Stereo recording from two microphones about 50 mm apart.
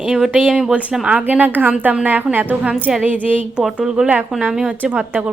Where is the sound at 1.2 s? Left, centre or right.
Right.